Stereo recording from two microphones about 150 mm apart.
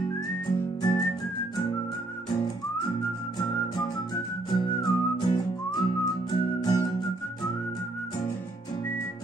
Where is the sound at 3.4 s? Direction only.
30° left (ahead or behind).